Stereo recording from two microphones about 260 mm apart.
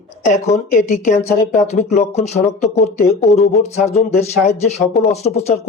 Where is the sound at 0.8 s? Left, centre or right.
Left.